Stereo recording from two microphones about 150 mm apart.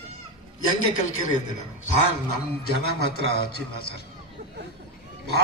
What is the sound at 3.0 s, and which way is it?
A man's voice, 90° left.